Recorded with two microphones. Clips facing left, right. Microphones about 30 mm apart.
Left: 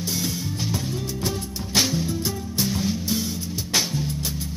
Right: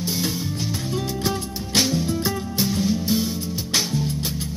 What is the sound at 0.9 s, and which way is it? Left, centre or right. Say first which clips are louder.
Music: right 3 dB; right.